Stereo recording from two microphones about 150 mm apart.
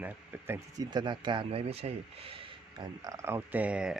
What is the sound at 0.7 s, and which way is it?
Speech, 25° right (ahead or behind).